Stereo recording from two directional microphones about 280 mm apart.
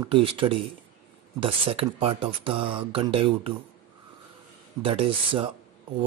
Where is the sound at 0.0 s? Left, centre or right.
Centre.